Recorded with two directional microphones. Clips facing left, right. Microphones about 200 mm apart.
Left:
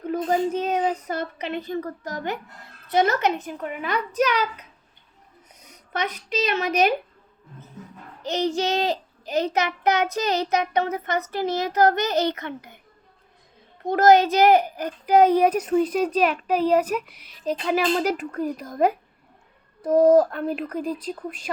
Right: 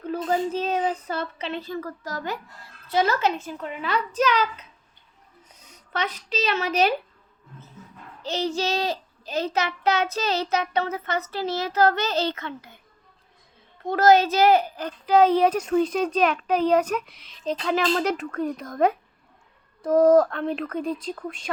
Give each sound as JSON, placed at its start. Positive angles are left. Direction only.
{"t": 0.2, "sound": "a child's voice", "side_deg": 20}
{"t": 6.0, "sound": "a child's voice", "side_deg": 15}
{"t": 8.2, "sound": "a child's voice", "side_deg": 15}
{"t": 13.8, "sound": "a child's voice", "side_deg": 15}
{"t": 20.3, "sound": "speech", "side_deg": 5}